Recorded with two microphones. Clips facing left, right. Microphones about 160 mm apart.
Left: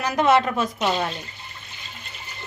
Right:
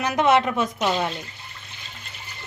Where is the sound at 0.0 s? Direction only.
20° right (ahead or behind).